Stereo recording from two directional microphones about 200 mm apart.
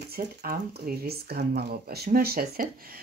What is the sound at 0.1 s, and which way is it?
Speech, 50° right (ahead or behind).